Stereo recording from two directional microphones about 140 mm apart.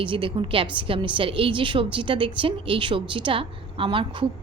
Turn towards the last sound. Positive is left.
turn(degrees=-35)  # may be behind; listen again after turning